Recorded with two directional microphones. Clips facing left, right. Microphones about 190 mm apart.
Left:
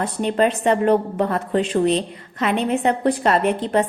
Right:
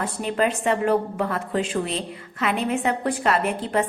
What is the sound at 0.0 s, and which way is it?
A woman's voice, 30° left (ahead or behind).